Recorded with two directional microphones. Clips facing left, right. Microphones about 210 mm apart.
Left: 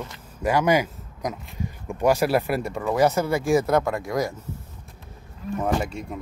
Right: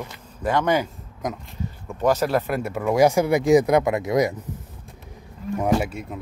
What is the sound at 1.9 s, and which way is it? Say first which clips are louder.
Speech: even; 10° left (ahead or behind).